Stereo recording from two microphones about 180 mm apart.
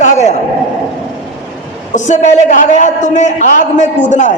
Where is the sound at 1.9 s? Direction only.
40° left (ahead or behind).